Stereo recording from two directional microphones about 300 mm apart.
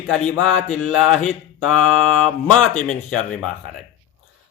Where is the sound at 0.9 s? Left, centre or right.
Centre.